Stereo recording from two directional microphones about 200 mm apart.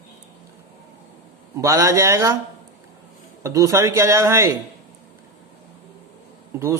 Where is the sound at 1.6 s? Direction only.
15° right (ahead or behind).